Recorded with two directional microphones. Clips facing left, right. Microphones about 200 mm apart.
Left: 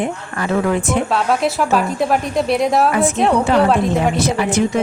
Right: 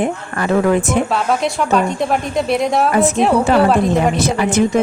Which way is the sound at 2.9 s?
40° right (ahead or behind).